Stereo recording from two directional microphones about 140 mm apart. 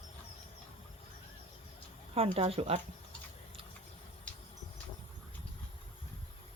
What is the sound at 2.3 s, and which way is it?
Speech, 45° right (ahead or behind).